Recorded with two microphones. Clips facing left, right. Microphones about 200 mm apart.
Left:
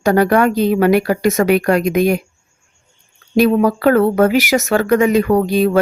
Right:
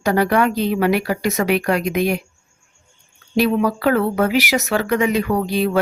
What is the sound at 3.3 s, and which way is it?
Speech, 45° left (ahead or behind).